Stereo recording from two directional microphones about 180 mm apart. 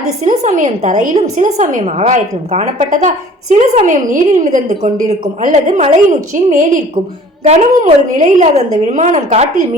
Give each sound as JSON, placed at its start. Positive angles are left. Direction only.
{"t": 0.3, "sound": "a woman's voice", "side_deg": -45}